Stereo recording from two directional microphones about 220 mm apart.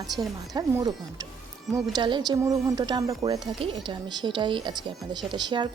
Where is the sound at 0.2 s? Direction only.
15° right (ahead or behind).